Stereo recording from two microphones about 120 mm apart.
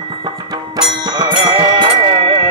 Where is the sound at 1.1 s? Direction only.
40° right (ahead or behind).